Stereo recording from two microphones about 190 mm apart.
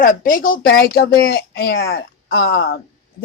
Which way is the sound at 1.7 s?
90° left.